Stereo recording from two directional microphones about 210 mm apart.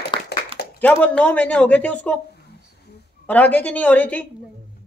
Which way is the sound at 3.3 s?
10° left (ahead or behind).